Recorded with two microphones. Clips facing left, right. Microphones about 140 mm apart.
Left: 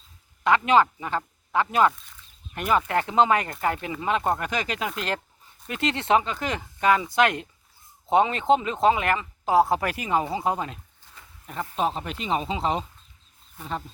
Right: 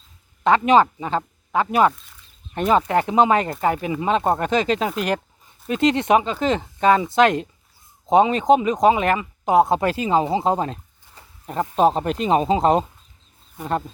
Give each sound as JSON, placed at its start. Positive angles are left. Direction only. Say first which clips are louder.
{"t": 0.4, "sound": "speech", "louder": "right 4 dB", "side_deg": -20}
{"t": 2.6, "sound": "speech", "louder": "right 5 dB", "side_deg": -30}
{"t": 13.6, "sound": "speech", "louder": "right 8 dB", "side_deg": -60}